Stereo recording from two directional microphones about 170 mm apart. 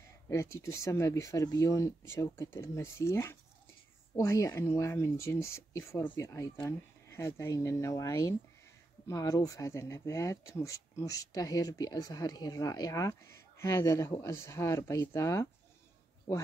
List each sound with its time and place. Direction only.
0.3 s speech: 15° left (ahead or behind)